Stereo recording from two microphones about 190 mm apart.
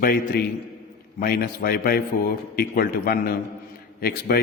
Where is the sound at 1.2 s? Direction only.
50° left (ahead or behind).